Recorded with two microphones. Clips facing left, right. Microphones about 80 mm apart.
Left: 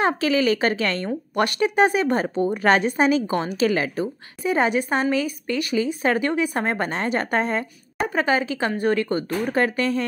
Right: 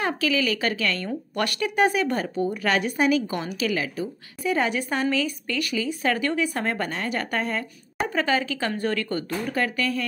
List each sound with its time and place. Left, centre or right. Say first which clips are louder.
0.0 s a woman's voice: left 4 dB; left
4.4 s speech: left 3 dB; left